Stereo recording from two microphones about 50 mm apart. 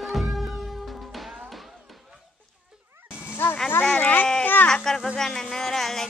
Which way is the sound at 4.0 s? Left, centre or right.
Left.